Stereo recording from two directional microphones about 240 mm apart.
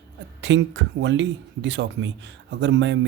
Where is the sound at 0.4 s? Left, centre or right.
Right.